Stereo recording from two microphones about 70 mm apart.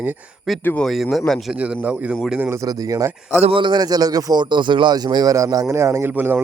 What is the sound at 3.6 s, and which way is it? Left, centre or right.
Speech, right.